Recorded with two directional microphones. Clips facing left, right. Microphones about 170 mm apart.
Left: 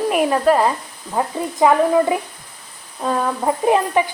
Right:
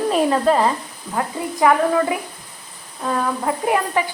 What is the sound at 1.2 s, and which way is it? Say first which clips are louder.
Speech: left 2 dB; 25° left (ahead or behind).